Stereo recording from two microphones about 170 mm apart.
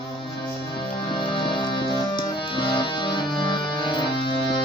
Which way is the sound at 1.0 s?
30° left (ahead or behind).